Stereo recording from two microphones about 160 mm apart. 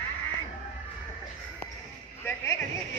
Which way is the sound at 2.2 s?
15° left (ahead or behind).